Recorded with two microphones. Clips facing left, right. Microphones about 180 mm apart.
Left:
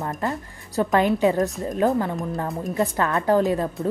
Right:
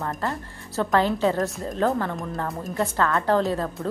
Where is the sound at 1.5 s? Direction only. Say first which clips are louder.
Left 3 dB; centre (ahead or behind).